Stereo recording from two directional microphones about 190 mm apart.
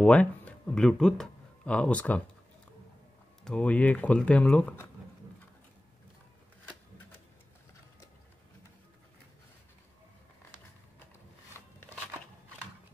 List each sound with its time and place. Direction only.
0.0 s speech: 5° left (ahead or behind)
3.4 s speech: 5° left (ahead or behind)